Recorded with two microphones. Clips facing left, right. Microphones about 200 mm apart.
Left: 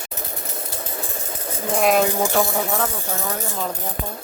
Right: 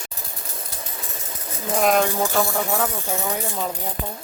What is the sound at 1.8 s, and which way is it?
Speech, 5° left (ahead or behind).